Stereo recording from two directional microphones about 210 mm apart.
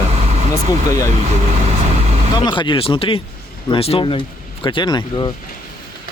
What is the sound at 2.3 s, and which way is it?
Speech, 20° left (ahead or behind).